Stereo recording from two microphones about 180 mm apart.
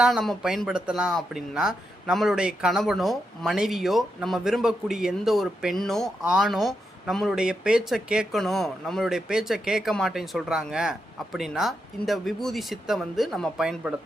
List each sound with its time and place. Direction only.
0.0 s speech: centre (ahead or behind)